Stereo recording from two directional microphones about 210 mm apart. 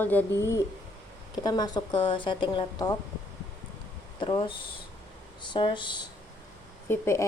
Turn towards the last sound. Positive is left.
turn(degrees=10)  # may be behind; listen again after turning